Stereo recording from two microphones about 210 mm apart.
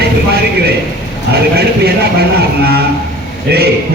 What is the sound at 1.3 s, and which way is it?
A man's voice, 50° right (ahead or behind).